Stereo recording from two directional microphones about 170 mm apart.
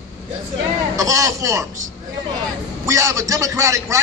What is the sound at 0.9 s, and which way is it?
Speech, 20° right (ahead or behind).